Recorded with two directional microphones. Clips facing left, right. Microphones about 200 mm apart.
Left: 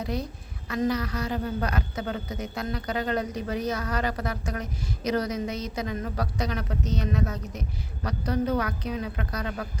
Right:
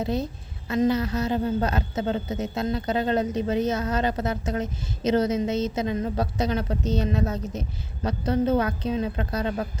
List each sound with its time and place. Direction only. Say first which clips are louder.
0.0 s a woman's voice: right 4 dB; 25° right (ahead or behind)